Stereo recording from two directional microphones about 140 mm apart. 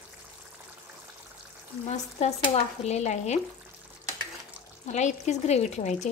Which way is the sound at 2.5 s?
50° left (ahead or behind).